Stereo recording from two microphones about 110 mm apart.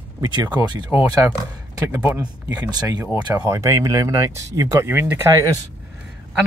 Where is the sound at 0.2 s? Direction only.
40° right (ahead or behind).